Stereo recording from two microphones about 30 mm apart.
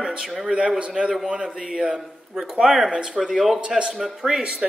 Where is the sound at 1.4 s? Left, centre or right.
Centre.